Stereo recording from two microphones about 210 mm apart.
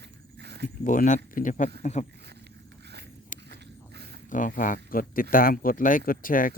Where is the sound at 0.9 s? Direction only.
35° left (ahead or behind).